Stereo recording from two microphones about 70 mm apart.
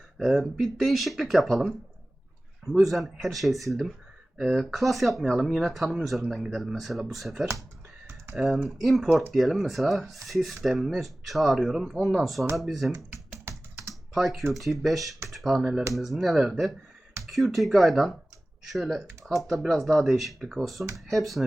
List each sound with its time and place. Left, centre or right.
0.2 s speech: centre
2.7 s speech: centre
13.4 s typing: right
14.1 s speech: centre